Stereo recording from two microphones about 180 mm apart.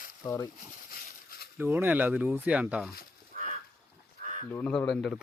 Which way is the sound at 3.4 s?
55° right (ahead or behind).